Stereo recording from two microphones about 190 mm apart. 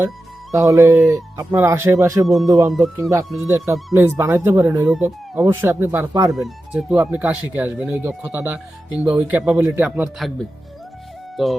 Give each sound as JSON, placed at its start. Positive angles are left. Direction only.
{"t": 0.5, "sound": "speech", "side_deg": -15}
{"t": 2.2, "sound": "speech", "side_deg": 0}
{"t": 3.0, "sound": "speech", "side_deg": -15}
{"t": 11.4, "sound": "speech", "side_deg": 0}